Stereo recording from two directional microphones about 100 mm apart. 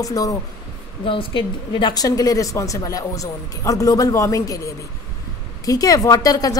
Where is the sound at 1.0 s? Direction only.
60° left (ahead or behind); by 6.6 s 35° left (ahead or behind).